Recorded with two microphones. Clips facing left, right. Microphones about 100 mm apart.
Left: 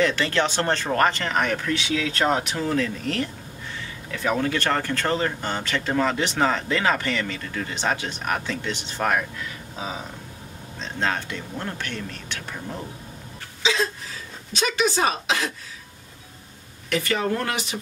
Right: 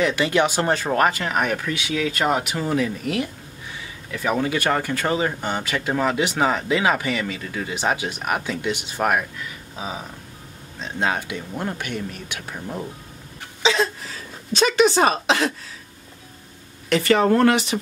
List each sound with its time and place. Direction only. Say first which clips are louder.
0.0 s speech: right 2 dB; 10° right (ahead or behind)
10.8 s speech: right 2 dB; 10° right (ahead or behind)
14.5 s a woman's voice: right 6 dB; 65° right (ahead or behind)
17.2 s a woman's voice: right 9 dB; 60° right (ahead or behind); by 17.7 s 75° right (ahead or behind)